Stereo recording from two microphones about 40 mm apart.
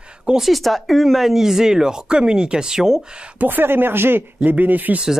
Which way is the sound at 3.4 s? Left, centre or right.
Right.